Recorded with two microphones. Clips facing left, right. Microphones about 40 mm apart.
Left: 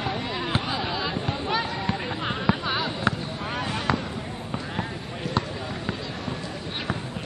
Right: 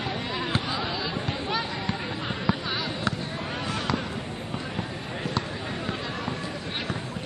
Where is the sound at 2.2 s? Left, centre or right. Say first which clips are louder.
Left 3 dB; left.